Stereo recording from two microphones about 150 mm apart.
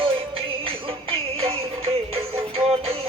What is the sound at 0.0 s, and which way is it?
Music, 35° right (ahead or behind).